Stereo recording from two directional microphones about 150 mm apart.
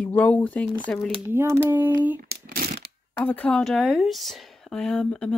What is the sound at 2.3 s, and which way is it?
Shuffling cards, 90° right.